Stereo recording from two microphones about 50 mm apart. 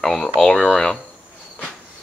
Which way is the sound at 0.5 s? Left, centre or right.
Centre.